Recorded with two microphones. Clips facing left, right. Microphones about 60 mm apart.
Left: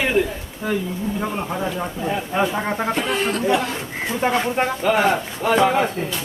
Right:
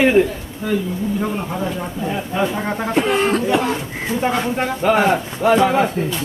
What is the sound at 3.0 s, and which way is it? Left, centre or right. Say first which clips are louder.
Speech: right 5 dB; right.